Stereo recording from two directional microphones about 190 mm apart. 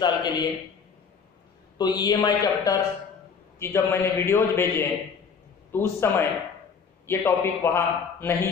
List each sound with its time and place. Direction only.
0.0 s a man's voice: 25° left (ahead or behind)
1.8 s a man's voice: 20° left (ahead or behind)